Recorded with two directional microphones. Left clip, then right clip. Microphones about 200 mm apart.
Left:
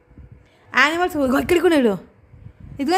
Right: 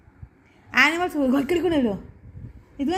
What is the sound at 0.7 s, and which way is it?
A woman's voice, 15° left (ahead or behind).